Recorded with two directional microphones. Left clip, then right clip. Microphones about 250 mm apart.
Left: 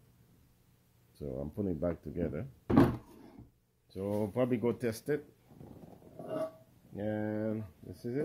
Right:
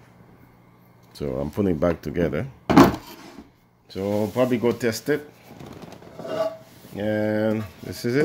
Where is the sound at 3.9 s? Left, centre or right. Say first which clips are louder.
Right 10 dB; centre.